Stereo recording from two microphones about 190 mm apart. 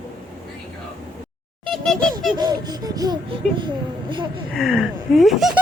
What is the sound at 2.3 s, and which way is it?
Speech, 20° right (ahead or behind).